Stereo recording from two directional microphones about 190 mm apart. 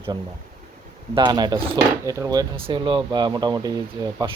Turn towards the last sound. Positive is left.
turn(degrees=-20)  # may be behind; listen again after turning